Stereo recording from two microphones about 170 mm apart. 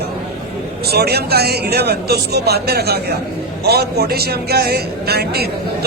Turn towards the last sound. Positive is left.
turn(degrees=-70)  # may be behind; listen again after turning